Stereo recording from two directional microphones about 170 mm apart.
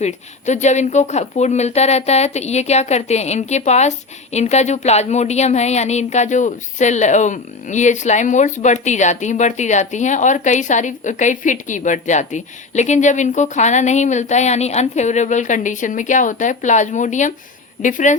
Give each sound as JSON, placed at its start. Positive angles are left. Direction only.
{"t": 0.0, "sound": "speech", "side_deg": 45}